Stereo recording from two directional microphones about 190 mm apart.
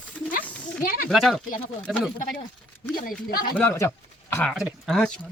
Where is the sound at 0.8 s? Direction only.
50° left (ahead or behind).